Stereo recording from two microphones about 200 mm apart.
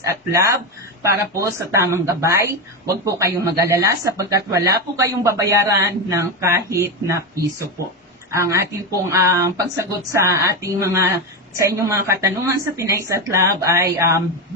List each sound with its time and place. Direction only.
0.0 s speech: 15° right (ahead or behind)